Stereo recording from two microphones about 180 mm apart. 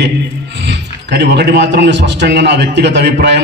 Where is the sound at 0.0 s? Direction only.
75° right (ahead or behind).